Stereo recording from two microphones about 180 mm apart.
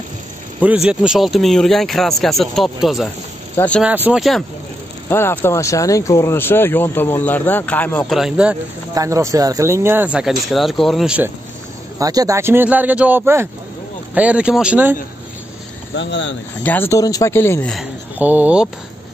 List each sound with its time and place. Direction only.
0.8 s speech: 5° right (ahead or behind)
3.8 s speech: 10° right (ahead or behind)
5.1 s speech: 15° left (ahead or behind)
8.2 s speech: 5° right (ahead or behind)
8.9 s speech: 15° right (ahead or behind)
12.0 s speech: 20° right (ahead or behind)
15.9 s speech: 90° left
16.6 s speech: 10° left (ahead or behind)
18.2 s speech: 10° right (ahead or behind)